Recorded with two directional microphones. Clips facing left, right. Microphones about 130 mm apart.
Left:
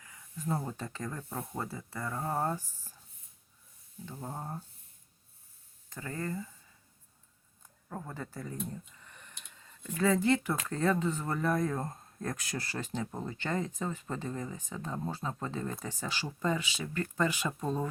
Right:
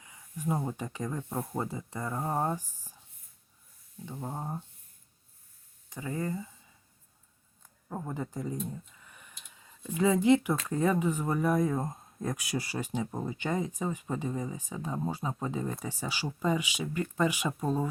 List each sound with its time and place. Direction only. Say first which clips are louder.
0.0 s speech: right 4 dB; 15° right (ahead or behind)
4.0 s speech: right 3 dB; 10° right (ahead or behind)
5.9 s speech: right 3 dB; 15° right (ahead or behind)
7.9 s speech: right 5 dB; 15° right (ahead or behind)
8.9 s a sound: even; 5° right (ahead or behind)
10.7 s speech: right 2 dB; 15° right (ahead or behind)